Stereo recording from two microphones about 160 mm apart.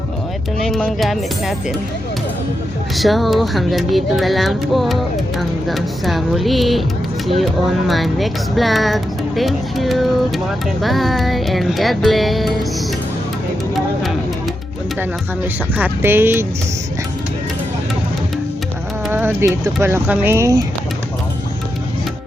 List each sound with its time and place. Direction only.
0.6 s speech: centre (ahead or behind)
2.9 s speech: centre (ahead or behind)
7.9 s speech: centre (ahead or behind)
13.7 s music: centre (ahead or behind)
15.8 s speech: 15° right (ahead or behind)
19.1 s speech: 15° right (ahead or behind)